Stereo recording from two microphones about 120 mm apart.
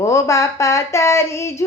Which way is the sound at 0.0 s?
25° left (ahead or behind).